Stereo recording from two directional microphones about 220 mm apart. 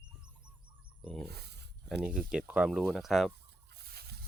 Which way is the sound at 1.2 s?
45° right (ahead or behind).